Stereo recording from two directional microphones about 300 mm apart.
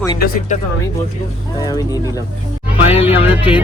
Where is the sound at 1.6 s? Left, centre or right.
Centre.